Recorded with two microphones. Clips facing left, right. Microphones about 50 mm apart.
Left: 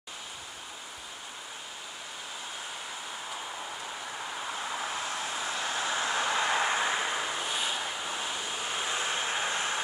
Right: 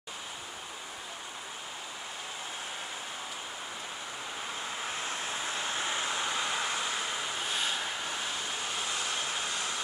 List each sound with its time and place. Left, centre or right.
5.8 s vehicle: left; by 7.3 s centre
7.3 s vehicle: centre
8.7 s vehicle: left